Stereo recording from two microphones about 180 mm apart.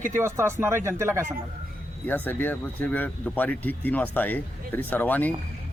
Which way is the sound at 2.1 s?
10° left (ahead or behind).